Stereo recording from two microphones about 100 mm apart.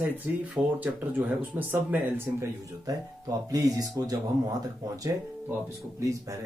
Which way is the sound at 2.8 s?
40° right (ahead or behind).